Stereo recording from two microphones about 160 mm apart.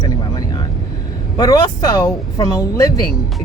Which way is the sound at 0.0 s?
25° left (ahead or behind).